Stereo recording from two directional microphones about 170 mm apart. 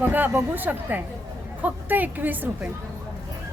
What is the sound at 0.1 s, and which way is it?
A woman's voice, 10° right (ahead or behind).